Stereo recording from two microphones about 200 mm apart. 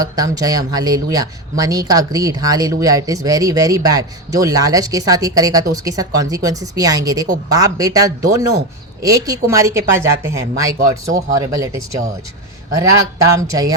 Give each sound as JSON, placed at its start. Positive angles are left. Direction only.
{"t": 0.0, "sound": "speech", "side_deg": -20}